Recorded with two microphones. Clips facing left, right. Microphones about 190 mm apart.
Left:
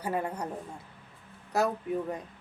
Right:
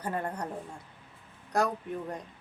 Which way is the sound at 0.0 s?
5° left (ahead or behind).